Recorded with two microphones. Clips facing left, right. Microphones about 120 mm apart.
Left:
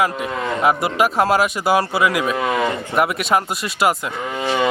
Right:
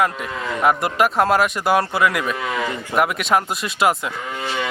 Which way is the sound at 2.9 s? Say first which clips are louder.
Right 1 dB; centre (ahead or behind).